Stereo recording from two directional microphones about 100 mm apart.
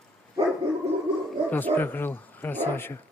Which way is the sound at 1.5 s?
20° left (ahead or behind).